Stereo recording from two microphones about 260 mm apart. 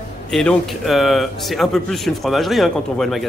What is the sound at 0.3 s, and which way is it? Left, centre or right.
Speech, centre.